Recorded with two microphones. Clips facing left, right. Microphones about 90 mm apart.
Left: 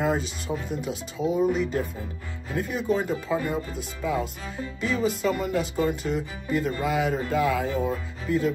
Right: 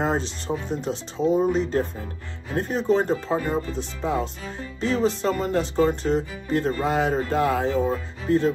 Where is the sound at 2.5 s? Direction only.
40° right (ahead or behind).